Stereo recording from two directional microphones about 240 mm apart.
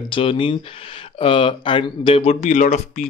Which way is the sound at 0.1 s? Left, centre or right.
Left.